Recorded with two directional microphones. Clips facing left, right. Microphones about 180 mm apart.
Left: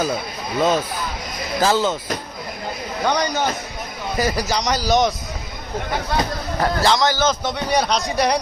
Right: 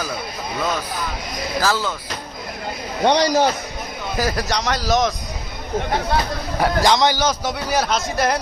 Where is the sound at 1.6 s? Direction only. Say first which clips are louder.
Left 4 dB; 20° left (ahead or behind).